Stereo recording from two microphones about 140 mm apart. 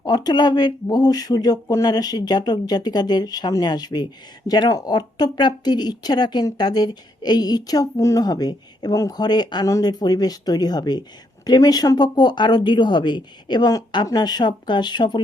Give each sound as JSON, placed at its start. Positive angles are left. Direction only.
{"t": 0.0, "sound": "speech", "side_deg": 30}